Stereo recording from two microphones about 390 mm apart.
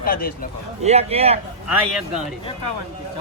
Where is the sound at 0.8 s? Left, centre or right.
Centre.